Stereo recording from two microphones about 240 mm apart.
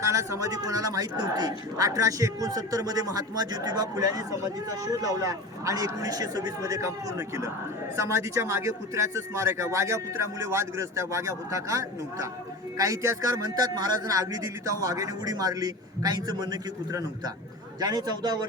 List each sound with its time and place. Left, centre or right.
0.0 s a man's voice: centre